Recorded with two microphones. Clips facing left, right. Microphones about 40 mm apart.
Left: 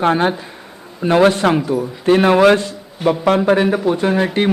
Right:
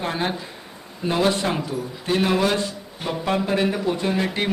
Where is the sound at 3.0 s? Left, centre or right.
Left.